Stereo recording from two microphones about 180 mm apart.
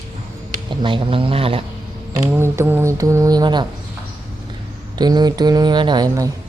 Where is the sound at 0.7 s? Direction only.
25° right (ahead or behind).